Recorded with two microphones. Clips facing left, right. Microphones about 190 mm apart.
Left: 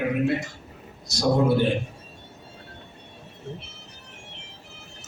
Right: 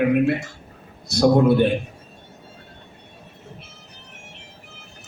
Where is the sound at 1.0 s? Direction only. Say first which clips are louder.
Right 6 dB; 60° right (ahead or behind).